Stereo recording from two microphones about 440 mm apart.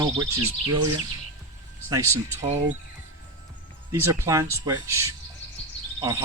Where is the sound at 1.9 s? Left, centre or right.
Centre.